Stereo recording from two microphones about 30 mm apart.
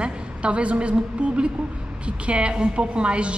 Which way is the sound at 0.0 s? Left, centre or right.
Right.